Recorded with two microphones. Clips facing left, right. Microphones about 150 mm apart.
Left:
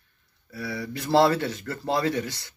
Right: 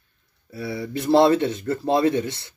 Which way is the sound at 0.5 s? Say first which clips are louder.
Right 4 dB; 25° right (ahead or behind).